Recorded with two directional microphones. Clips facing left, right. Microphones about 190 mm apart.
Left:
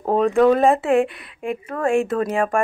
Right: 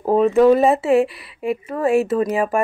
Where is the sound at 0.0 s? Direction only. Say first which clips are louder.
Right 2 dB; 5° right (ahead or behind).